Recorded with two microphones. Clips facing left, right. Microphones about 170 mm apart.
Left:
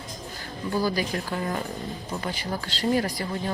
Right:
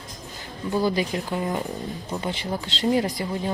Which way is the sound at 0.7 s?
20° right (ahead or behind).